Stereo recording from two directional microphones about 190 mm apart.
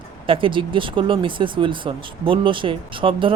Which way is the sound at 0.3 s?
25° right (ahead or behind).